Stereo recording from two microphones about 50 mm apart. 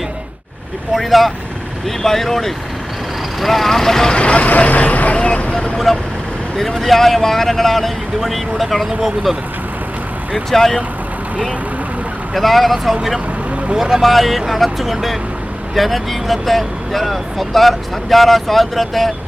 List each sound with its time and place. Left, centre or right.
0.9 s speech: centre
4.1 s vehicle: left
5.7 s speech: centre
10.3 s speech: centre
12.3 s speech: centre